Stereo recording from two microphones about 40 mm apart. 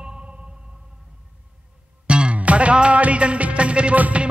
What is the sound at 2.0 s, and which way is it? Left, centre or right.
Music, right.